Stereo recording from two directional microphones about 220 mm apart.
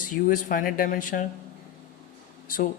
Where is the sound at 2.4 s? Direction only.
40° left (ahead or behind).